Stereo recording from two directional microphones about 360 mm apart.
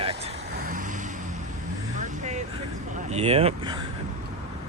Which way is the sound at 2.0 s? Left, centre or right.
Centre.